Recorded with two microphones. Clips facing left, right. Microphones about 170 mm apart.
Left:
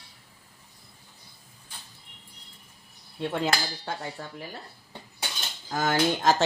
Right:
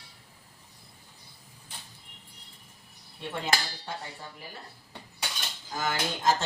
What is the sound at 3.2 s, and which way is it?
Speech, 85° left.